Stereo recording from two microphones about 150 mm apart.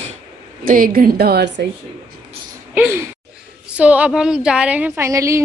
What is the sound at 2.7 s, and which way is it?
A woman's voice, 10° right (ahead or behind).